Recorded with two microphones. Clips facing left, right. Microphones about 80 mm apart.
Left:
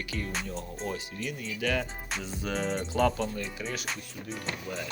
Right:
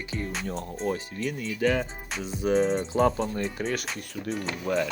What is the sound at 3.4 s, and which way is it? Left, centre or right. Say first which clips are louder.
Speech: right 6 dB; right.